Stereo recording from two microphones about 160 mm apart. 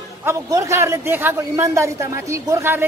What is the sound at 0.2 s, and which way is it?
A man's voice, 20° right (ahead or behind).